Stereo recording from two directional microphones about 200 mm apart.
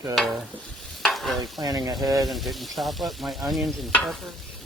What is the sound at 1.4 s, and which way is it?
Speech, 20° right (ahead or behind).